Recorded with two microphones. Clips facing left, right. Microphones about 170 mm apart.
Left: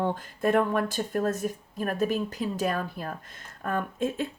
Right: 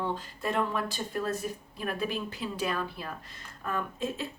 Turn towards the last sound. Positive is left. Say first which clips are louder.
# left 5 dB
turn(degrees=50)  # may be behind; listen again after turning